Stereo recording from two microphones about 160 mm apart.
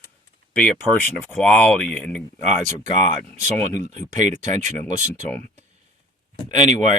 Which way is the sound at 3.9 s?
50° right (ahead or behind).